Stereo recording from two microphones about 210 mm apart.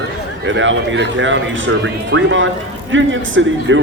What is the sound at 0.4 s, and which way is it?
Speech, 65° right (ahead or behind).